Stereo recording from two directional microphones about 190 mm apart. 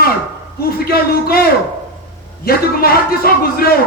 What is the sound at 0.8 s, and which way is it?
Speech, 50° left (ahead or behind).